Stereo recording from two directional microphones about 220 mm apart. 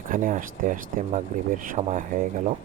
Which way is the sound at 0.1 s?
40° right (ahead or behind).